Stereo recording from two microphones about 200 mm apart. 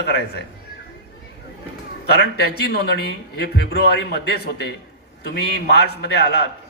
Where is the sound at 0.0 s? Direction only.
55° left (ahead or behind).